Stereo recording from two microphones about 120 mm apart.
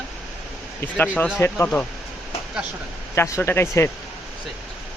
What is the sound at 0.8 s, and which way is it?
Speech, 15° left (ahead or behind).